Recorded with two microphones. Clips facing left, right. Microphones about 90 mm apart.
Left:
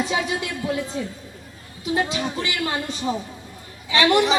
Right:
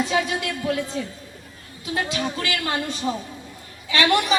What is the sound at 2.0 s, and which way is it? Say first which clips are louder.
A man's voice: even; 20° left (ahead or behind).